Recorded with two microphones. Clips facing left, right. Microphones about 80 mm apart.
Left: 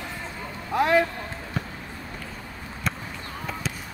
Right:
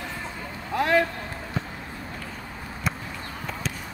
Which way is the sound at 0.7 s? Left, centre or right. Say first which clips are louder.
Left 2 dB; centre.